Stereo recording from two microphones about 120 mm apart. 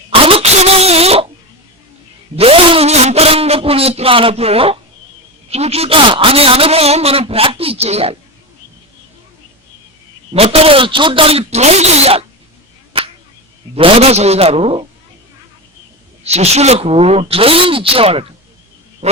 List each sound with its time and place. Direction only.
0.1 s a sound: 50° right (ahead or behind)
2.3 s a sound: 50° right (ahead or behind)
5.5 s a man's voice: 60° right (ahead or behind)
10.3 s a man's voice: 55° right (ahead or behind)
13.7 s a man's voice: 55° right (ahead or behind)
16.2 s a man's voice: 60° right (ahead or behind)